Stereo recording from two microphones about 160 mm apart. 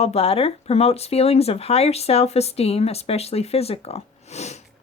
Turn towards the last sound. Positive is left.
turn(degrees=45)  # may be behind; listen again after turning